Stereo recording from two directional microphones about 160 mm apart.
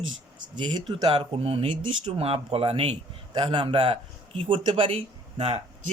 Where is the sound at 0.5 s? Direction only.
25° right (ahead or behind).